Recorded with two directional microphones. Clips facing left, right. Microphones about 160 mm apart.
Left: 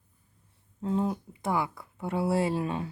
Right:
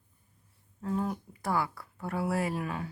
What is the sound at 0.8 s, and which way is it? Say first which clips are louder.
Speech: left 3 dB; 25° left (ahead or behind).